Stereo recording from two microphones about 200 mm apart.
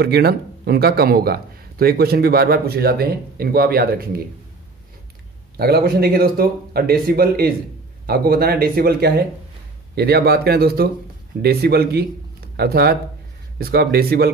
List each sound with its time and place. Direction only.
0.0 s speech: 55° right (ahead or behind)
5.6 s speech: 50° right (ahead or behind)